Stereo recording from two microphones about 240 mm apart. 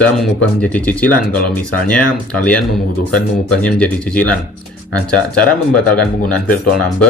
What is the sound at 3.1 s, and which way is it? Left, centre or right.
Speech, centre.